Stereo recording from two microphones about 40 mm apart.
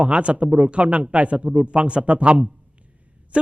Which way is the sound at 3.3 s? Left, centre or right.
Right.